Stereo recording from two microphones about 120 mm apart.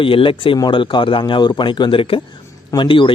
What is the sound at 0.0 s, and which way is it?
Speech, 45° left (ahead or behind).